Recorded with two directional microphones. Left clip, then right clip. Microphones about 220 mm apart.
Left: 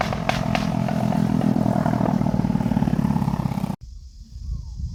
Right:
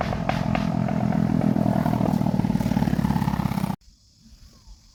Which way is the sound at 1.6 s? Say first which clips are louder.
Left 2 dB; centre (ahead or behind).